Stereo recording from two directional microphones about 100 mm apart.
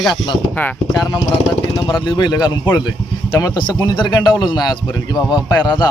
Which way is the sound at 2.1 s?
45° left (ahead or behind).